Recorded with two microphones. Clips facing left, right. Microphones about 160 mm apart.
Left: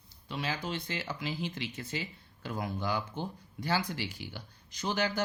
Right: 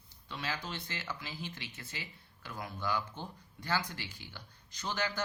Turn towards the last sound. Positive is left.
turn(degrees=15)  # may be behind; listen again after turning